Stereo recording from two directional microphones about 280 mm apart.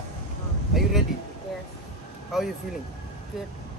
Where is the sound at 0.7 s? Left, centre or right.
Centre.